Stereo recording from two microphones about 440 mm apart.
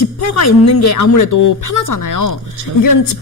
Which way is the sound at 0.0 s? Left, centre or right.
Left.